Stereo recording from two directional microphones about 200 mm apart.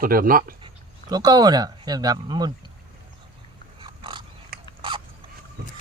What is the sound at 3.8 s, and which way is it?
Pig, 25° right (ahead or behind).